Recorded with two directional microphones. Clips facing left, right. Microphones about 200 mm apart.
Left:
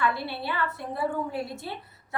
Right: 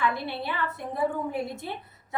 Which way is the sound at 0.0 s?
20° right (ahead or behind).